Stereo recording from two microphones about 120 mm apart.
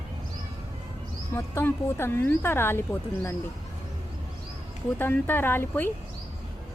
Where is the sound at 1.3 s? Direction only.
20° left (ahead or behind).